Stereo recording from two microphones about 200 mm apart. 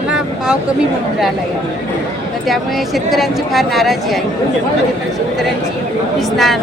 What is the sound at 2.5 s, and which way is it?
A woman's voice, centre (ahead or behind).